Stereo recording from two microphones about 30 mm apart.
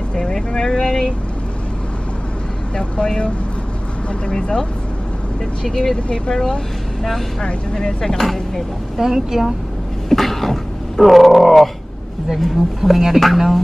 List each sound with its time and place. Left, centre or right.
0.1 s vehicle: left
2.8 s speech: left
4.4 s speech: left
7.7 s speech: left
8.2 s speech: centre
8.9 s a woman's voice: centre
10.0 s a sound: centre
12.4 s speech: centre